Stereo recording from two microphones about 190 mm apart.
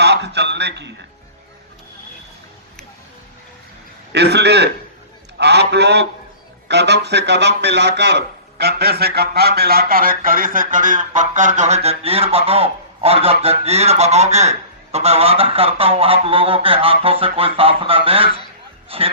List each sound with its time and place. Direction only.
0.0 s a man's voice: 60° right (ahead or behind)
4.1 s a man's voice: 60° right (ahead or behind); by 14.5 s 35° right (ahead or behind)
14.9 s goose: 30° right (ahead or behind)
18.9 s speech: 30° right (ahead or behind)